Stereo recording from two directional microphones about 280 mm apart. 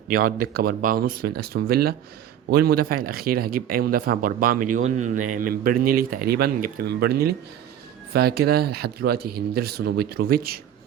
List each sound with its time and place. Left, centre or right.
0.5 s speech: right